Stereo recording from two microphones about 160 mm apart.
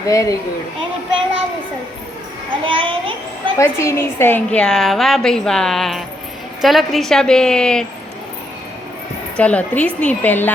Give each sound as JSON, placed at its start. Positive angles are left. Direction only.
{"t": 0.1, "sound": "speech", "side_deg": 20}
{"t": 2.6, "sound": "a child's voice", "side_deg": -35}
{"t": 3.6, "sound": "a woman's voice", "side_deg": 15}
{"t": 9.4, "sound": "a woman's voice", "side_deg": 10}